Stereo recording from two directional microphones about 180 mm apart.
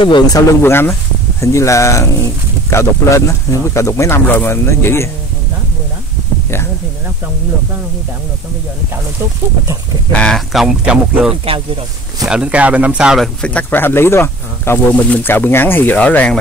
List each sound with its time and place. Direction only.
0.0 s speech: 25° left (ahead or behind)
0.6 s speech: 15° left (ahead or behind)
10.1 s speech: 5° left (ahead or behind)
11.4 s speech: 30° right (ahead or behind)
12.3 s speech: 5° right (ahead or behind)